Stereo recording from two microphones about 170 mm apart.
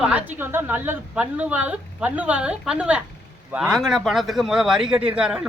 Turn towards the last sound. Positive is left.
turn(degrees=-5)  # may be behind; listen again after turning